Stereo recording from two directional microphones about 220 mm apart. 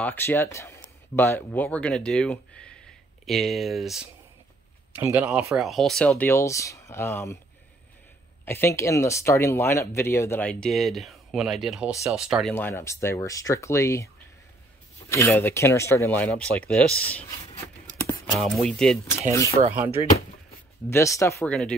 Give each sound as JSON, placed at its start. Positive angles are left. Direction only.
{"t": 0.0, "sound": "speech", "side_deg": 10}
{"t": 8.5, "sound": "speech", "side_deg": 10}
{"t": 12.5, "sound": "speech", "side_deg": 10}
{"t": 18.2, "sound": "speech", "side_deg": 0}
{"t": 19.6, "sound": "speech", "side_deg": -30}
{"t": 20.9, "sound": "speech", "side_deg": 15}